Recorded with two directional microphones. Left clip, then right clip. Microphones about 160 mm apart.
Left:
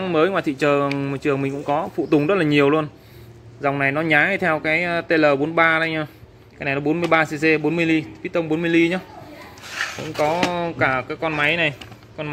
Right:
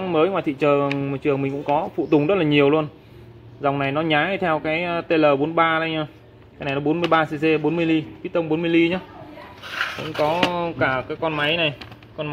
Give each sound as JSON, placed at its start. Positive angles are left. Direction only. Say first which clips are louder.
{"t": 0.0, "sound": "a man's voice", "louder": "left 1 dB", "side_deg": 10}
{"t": 7.8, "sound": "a man's voice", "louder": "left 1 dB", "side_deg": -55}
{"t": 8.3, "sound": "a man's voice", "louder": "even", "side_deg": 5}
{"t": 9.8, "sound": "a sound", "louder": "right 1 dB", "side_deg": -20}
{"t": 10.1, "sound": "speech", "louder": "even", "side_deg": 10}